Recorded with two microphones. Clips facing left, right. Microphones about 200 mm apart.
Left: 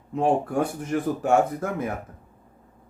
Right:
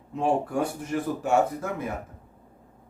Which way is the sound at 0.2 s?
50° left (ahead or behind).